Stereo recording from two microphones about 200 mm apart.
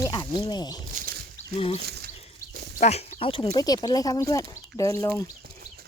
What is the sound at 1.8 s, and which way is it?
Speech, 55° right (ahead or behind).